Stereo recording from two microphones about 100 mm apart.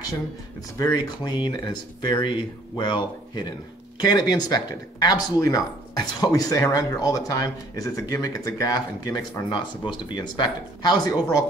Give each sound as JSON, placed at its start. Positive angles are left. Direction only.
{"t": 0.9, "sound": "speech", "side_deg": 45}